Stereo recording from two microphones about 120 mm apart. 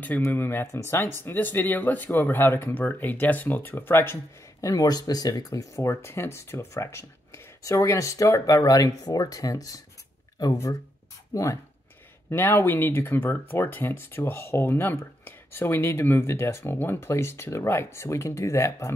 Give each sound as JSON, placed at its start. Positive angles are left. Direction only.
{"t": 0.0, "sound": "speech", "side_deg": 15}